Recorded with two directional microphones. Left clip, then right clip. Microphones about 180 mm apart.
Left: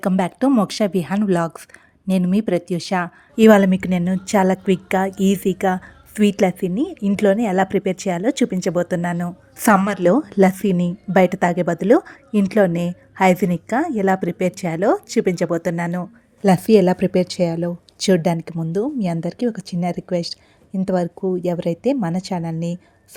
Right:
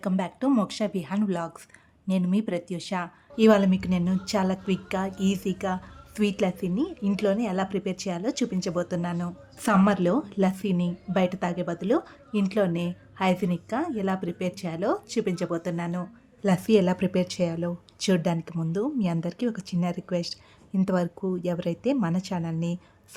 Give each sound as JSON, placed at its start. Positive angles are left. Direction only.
{"t": 0.0, "sound": "a woman's voice", "side_deg": 45}
{"t": 9.6, "sound": "a woman's voice", "side_deg": 45}